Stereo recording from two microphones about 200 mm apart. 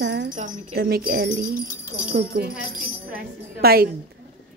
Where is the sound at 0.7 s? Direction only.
50° right (ahead or behind).